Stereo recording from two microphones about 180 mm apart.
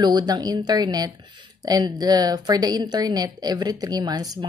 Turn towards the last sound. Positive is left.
turn(degrees=-20)  # may be behind; listen again after turning